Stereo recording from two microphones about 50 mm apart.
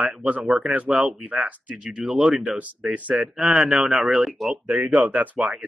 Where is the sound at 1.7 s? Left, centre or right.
Centre.